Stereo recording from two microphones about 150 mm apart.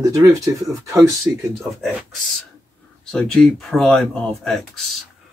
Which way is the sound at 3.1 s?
5° left (ahead or behind).